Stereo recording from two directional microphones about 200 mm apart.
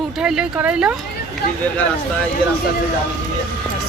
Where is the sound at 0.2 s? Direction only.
5° right (ahead or behind).